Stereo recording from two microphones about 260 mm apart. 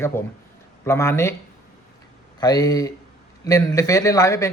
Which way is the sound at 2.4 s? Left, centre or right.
Centre.